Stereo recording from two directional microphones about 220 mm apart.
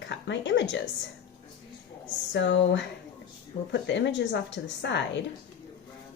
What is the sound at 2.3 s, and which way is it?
Speech, 55° left (ahead or behind).